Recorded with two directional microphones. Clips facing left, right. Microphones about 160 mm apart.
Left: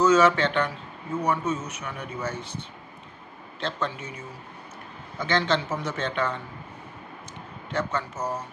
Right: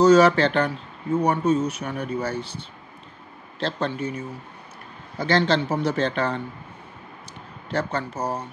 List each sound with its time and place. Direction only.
0.0 s speech: 35° right (ahead or behind)
5.2 s speech: 35° right (ahead or behind)
7.7 s speech: 35° right (ahead or behind)